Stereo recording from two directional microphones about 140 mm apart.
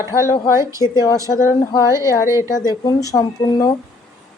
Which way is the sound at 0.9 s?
25° left (ahead or behind).